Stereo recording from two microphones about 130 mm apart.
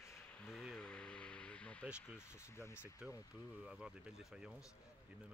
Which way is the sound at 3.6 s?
5° right (ahead or behind).